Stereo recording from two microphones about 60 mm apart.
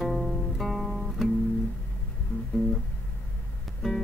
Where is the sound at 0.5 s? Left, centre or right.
Centre.